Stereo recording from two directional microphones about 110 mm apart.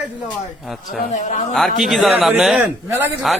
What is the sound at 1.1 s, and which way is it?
Speech, 90° left.